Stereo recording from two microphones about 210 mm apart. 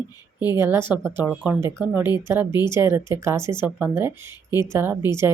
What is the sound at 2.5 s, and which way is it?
Speech, 20° left (ahead or behind).